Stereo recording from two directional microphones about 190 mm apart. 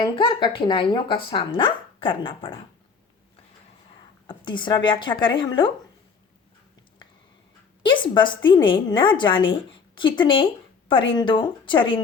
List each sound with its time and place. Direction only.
0.0 s a woman's voice: 25° left (ahead or behind)
4.3 s a woman's voice: 25° left (ahead or behind)
7.8 s a woman's voice: 25° left (ahead or behind)